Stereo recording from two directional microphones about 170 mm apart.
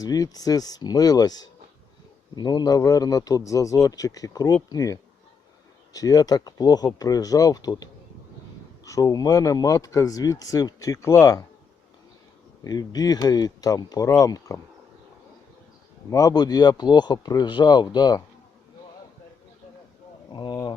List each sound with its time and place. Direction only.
0.0 s a man's voice: 20° left (ahead or behind)
12.6 s a man's voice: 20° left (ahead or behind)
16.0 s a man's voice: 20° left (ahead or behind)
20.3 s a man's voice: 25° left (ahead or behind)